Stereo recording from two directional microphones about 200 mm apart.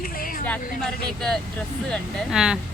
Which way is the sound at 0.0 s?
45° left (ahead or behind).